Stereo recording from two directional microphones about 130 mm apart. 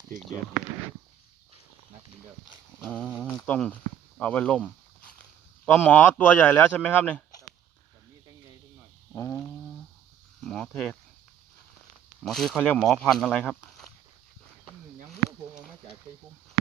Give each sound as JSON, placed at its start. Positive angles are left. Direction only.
{"t": 3.2, "sound": "a man's voice", "side_deg": 10}
{"t": 9.1, "sound": "a sound", "side_deg": 20}
{"t": 10.4, "sound": "speech", "side_deg": 5}
{"t": 12.2, "sound": "speech", "side_deg": 0}